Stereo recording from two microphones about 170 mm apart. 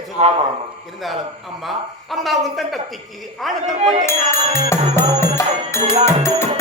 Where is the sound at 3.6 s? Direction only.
45° right (ahead or behind).